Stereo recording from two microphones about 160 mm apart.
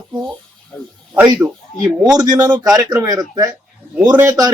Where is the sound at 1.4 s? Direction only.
20° right (ahead or behind).